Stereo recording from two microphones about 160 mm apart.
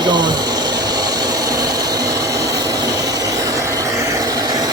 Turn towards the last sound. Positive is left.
turn(degrees=-25)  # may be behind; listen again after turning